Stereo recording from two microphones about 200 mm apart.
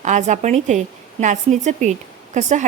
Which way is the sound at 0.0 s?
35° right (ahead or behind).